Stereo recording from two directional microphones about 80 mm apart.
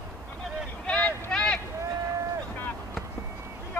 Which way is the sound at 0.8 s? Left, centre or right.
Centre.